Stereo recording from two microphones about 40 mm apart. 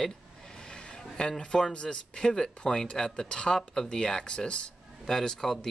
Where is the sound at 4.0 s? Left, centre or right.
Left.